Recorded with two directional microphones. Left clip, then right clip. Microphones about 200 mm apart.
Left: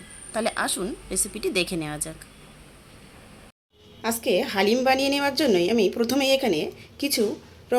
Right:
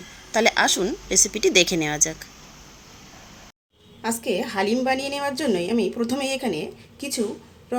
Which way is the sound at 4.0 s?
5° left (ahead or behind).